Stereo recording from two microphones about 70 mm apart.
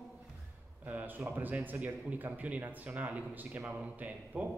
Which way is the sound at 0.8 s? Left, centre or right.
Right.